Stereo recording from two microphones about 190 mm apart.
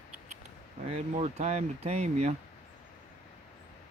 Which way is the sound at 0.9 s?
35° right (ahead or behind).